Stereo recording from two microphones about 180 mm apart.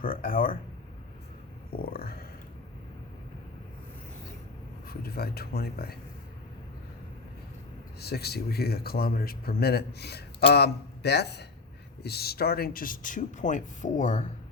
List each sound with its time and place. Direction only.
0.0 s speech: 50° left (ahead or behind)
1.7 s stomach rumble: 55° left (ahead or behind)
4.9 s speech: 60° left (ahead or behind)
7.9 s speech: 65° left (ahead or behind); by 14.3 s 45° left (ahead or behind)